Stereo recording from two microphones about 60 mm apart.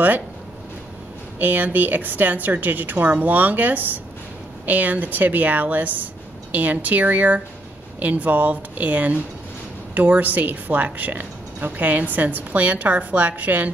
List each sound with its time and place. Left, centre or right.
1.4 s a woman's voice: right